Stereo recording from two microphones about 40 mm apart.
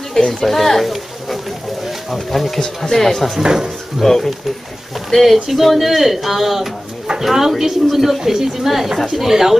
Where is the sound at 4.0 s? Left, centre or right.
Centre.